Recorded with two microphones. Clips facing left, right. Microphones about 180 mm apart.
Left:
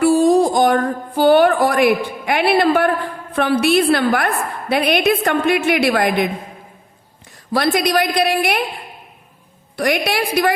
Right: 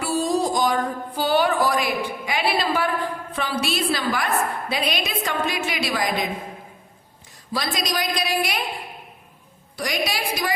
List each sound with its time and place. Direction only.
0.0 s music: 55° left (ahead or behind)
3.3 s a woman's voice: 60° left (ahead or behind)
7.5 s a woman's voice: 60° left (ahead or behind)
9.7 s a woman's voice: 60° left (ahead or behind)